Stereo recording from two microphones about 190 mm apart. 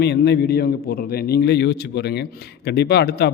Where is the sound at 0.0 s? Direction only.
60° left (ahead or behind).